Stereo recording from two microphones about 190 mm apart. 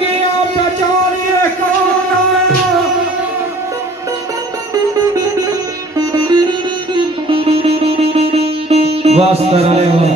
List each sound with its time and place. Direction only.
4.9 s music: 20° right (ahead or behind)
5.9 s sitar: 20° right (ahead or behind)